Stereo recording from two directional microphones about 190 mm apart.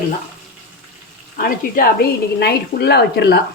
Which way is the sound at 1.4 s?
50° left (ahead or behind).